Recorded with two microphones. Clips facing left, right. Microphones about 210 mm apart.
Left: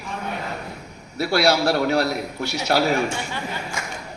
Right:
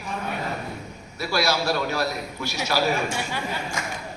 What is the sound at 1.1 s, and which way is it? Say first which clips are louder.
A man's voice: left 5 dB; 70° left (ahead or behind).